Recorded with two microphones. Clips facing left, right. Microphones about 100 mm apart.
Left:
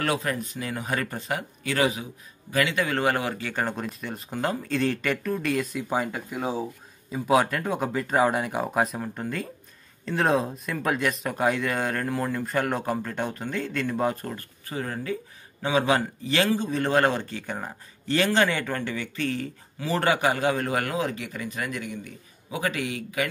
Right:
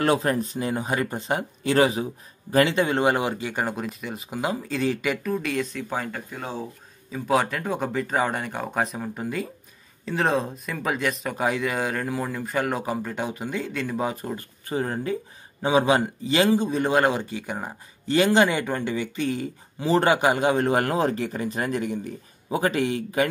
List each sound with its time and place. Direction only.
0.0 s a man's voice: 30° right (ahead or behind); by 14.3 s 5° right (ahead or behind)
14.3 s a man's voice: 20° right (ahead or behind)